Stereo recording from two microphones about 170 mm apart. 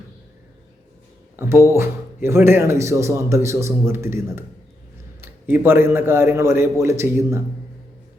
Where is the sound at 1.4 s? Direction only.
15° right (ahead or behind).